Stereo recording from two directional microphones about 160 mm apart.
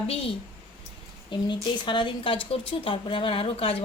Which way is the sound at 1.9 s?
30° left (ahead or behind).